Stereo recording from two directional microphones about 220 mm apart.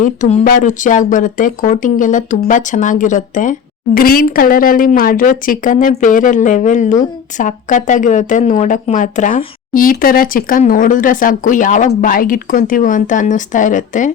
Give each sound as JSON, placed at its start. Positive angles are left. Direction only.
{"t": 0.0, "sound": "speech", "side_deg": 35}